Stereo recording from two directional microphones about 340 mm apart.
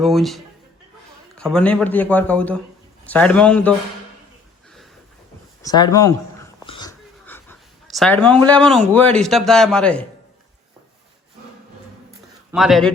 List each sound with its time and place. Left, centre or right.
0.0 s speech: centre
5.6 s speech: centre
6.7 s a sound: centre
8.9 s speech: centre
12.5 s speech: centre